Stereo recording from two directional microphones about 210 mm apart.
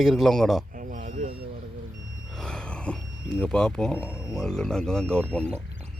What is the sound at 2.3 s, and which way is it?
Speech, 5° left (ahead or behind).